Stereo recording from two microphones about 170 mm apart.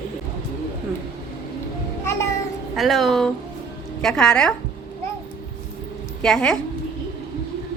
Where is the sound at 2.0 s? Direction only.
15° left (ahead or behind).